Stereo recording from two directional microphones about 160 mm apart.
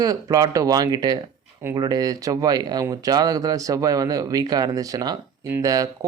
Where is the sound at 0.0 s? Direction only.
20° right (ahead or behind).